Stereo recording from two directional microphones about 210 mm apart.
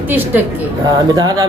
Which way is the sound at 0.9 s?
20° right (ahead or behind).